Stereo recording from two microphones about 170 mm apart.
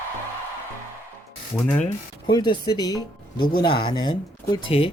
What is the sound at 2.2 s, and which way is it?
Speech, 25° left (ahead or behind).